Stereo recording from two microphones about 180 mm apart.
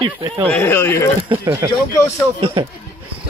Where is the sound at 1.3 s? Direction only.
15° right (ahead or behind).